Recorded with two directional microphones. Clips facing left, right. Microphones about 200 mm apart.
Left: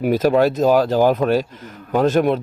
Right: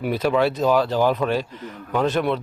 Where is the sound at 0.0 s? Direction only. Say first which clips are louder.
Left 5 dB; 45° left (ahead or behind).